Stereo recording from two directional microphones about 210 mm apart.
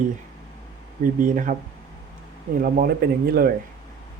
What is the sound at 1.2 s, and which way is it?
Speech, 40° right (ahead or behind).